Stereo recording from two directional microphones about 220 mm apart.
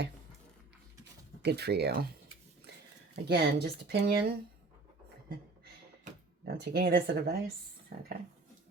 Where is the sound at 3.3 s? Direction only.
50° right (ahead or behind).